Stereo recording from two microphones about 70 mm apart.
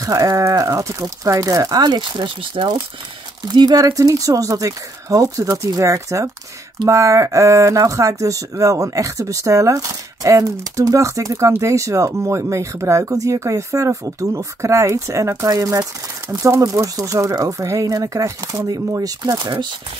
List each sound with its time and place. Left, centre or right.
0.0 s speech: right
1.8 s speech: right
3.4 s speech: right